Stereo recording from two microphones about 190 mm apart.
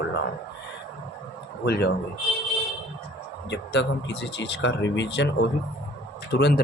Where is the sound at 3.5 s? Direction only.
65° left (ahead or behind).